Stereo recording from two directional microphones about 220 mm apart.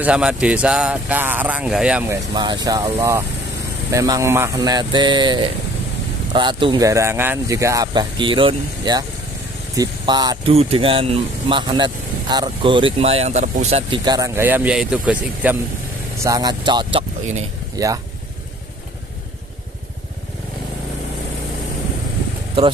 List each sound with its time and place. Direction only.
0.0 s speech: 5° right (ahead or behind)
2.3 s speech: 20° right (ahead or behind)
16.2 s speech: 15° right (ahead or behind)